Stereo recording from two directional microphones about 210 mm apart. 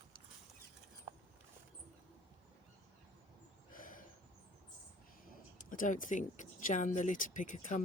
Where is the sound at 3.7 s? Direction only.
40° left (ahead or behind).